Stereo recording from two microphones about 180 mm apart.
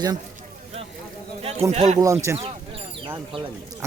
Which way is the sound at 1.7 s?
45° right (ahead or behind).